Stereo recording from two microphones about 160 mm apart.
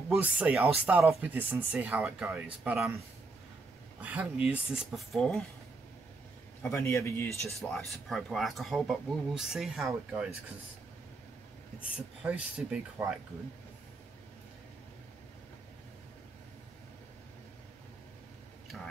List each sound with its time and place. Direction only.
0.1 s speech: 5° right (ahead or behind)
4.0 s speech: 10° right (ahead or behind)
6.6 s speech: 15° left (ahead or behind)
7.6 s speech: centre (ahead or behind)
12.2 s speech: 5° right (ahead or behind)